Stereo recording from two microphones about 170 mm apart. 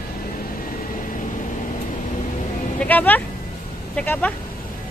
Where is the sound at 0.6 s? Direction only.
55° left (ahead or behind).